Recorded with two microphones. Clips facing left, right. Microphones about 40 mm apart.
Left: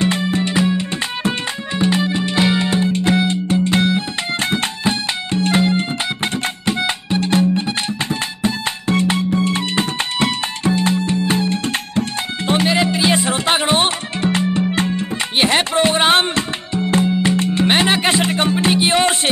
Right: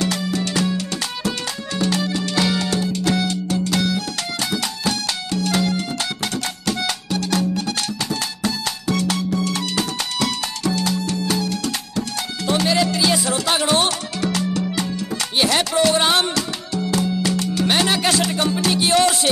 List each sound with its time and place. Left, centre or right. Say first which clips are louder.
0.0 s music: left 4 dB; left